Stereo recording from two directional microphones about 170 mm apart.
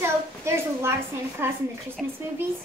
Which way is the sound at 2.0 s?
5° right (ahead or behind).